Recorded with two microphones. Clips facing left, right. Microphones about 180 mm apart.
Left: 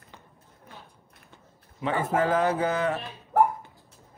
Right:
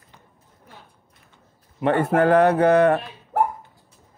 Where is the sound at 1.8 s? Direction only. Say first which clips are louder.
Right 7 dB; 65° right (ahead or behind).